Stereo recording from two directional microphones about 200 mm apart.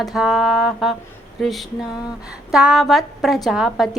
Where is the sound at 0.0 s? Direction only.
Centre (ahead or behind).